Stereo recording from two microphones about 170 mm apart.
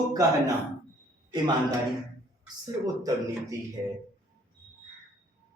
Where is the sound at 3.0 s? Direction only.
20° right (ahead or behind).